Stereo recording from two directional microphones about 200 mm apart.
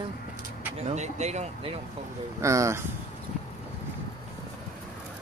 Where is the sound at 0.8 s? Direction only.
35° right (ahead or behind).